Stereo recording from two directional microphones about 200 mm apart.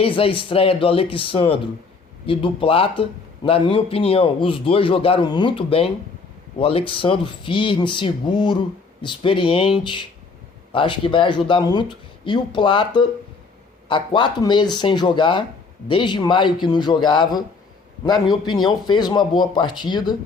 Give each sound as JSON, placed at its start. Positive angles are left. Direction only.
{"t": 0.0, "sound": "a man's voice", "side_deg": 25}